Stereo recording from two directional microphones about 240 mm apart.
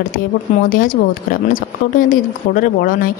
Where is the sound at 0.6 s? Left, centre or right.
Left.